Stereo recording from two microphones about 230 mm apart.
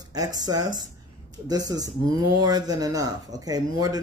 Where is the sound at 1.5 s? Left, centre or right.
Centre.